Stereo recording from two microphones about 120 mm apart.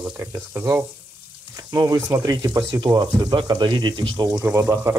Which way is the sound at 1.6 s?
30° right (ahead or behind).